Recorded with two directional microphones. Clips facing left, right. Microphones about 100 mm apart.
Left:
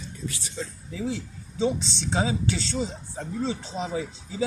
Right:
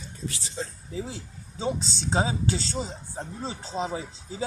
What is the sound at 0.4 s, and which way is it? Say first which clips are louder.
Speech: even; 35° right (ahead or behind).